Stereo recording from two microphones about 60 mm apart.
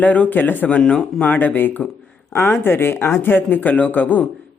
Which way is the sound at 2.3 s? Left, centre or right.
Left.